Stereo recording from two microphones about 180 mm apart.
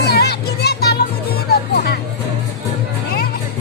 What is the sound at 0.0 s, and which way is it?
Music, 60° left (ahead or behind).